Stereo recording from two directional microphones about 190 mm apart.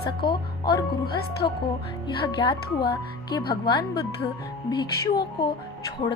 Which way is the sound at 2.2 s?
25° left (ahead or behind).